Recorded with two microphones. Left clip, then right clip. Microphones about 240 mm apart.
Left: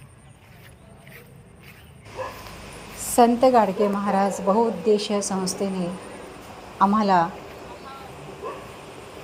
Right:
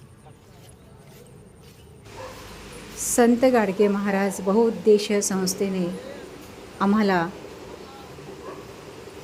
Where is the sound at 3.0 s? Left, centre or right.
Centre.